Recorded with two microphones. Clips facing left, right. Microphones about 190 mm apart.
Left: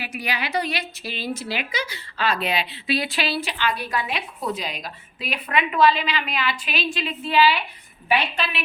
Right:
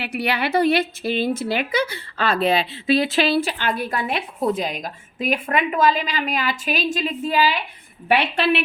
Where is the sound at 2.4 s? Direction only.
30° right (ahead or behind).